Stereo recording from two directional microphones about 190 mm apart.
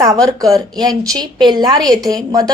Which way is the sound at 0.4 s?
20° right (ahead or behind).